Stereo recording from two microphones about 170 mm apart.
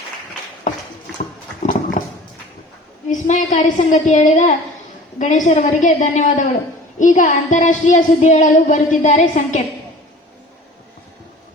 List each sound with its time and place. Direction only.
1.6 s dog: 50° left (ahead or behind)
3.1 s speech: 45° left (ahead or behind)